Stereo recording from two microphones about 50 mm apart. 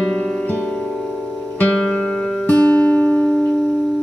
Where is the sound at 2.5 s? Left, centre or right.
Left.